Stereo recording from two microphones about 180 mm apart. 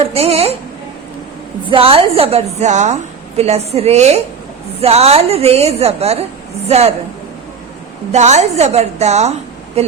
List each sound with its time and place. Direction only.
0.1 s a woman's voice: 35° right (ahead or behind)
1.7 s a woman's voice: 30° right (ahead or behind)
8.1 s a woman's voice: 40° right (ahead or behind)